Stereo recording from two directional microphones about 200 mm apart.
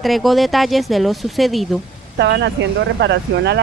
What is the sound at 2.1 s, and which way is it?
Speech, 60° right (ahead or behind).